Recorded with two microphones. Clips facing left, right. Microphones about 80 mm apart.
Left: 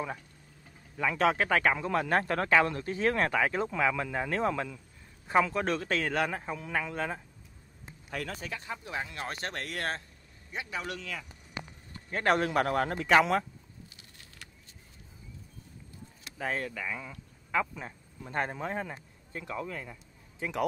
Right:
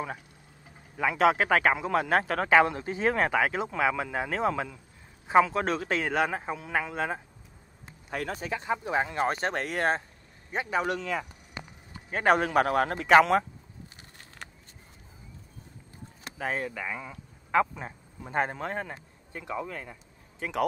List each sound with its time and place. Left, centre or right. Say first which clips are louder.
0.7 s speech: right 3 dB; centre
8.8 s speech: right 11 dB; right
10.5 s a man's voice: right 8 dB; right
11.9 s speech: right 4 dB; centre
16.3 s speech: right 2 dB; centre
16.7 s speech: right 2 dB; right; by 18.8 s centre
19.3 s speech: right 2 dB; centre
20.3 s speech: right 3 dB; right